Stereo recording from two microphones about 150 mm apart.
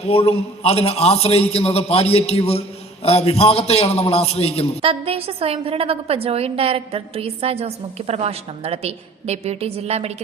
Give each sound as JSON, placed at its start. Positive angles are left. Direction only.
{"t": 0.0, "sound": "a man's voice", "side_deg": 45}
{"t": 4.8, "sound": "a woman's voice", "side_deg": -40}